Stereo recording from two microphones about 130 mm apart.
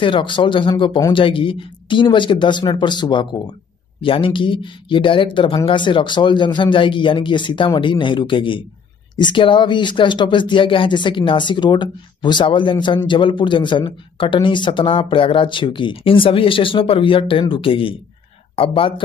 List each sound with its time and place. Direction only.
0.0 s speech: 40° left (ahead or behind)